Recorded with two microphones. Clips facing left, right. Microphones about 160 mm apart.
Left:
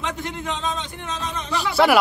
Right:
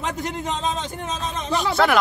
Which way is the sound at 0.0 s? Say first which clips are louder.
Right 2 dB; 45° right (ahead or behind).